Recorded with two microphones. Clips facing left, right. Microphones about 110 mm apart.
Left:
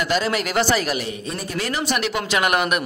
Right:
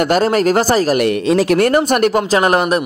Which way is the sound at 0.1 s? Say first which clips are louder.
Right 8 dB; 45° right (ahead or behind).